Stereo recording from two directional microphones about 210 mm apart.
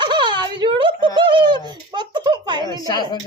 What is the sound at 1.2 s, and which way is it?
Speech, 20° right (ahead or behind).